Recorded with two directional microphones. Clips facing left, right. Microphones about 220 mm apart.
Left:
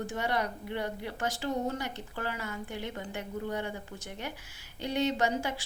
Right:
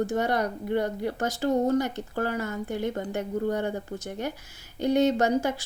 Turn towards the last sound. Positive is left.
turn(degrees=-40)  # may be behind; listen again after turning